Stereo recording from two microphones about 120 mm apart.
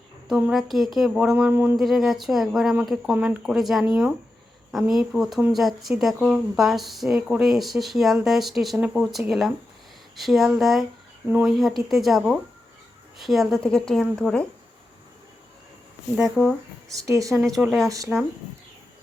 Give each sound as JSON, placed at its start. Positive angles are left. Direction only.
{"t": 0.3, "sound": "speech", "side_deg": -5}
{"t": 1.8, "sound": "speech", "side_deg": 0}
{"t": 16.1, "sound": "speech", "side_deg": 0}
{"t": 17.0, "sound": "speech", "side_deg": -30}